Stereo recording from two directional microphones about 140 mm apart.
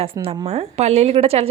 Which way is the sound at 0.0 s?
45° right (ahead or behind).